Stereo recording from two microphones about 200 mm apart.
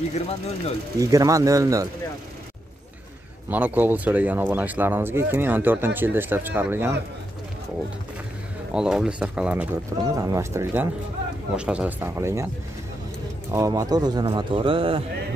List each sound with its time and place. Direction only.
0.9 s speech: 15° right (ahead or behind)
3.4 s speech: 10° right (ahead or behind)
8.7 s speech: 5° right (ahead or behind)
10.0 s speech: 15° right (ahead or behind)
13.5 s speech: 15° right (ahead or behind)